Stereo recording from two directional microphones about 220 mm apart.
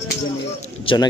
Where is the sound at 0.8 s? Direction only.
20° left (ahead or behind).